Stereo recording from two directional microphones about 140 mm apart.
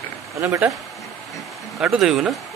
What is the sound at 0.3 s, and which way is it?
Speech, 20° right (ahead or behind).